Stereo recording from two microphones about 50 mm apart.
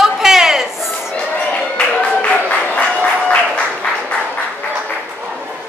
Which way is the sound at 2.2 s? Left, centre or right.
Left.